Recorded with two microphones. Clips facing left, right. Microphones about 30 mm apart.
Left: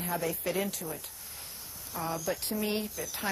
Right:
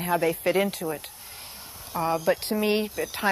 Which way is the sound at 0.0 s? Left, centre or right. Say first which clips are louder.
Right 9 dB; right.